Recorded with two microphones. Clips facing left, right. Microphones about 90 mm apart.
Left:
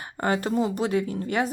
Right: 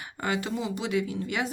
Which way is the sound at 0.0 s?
40° left (ahead or behind).